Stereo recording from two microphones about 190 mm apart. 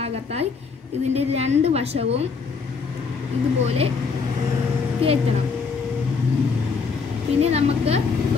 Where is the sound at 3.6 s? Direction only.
30° right (ahead or behind).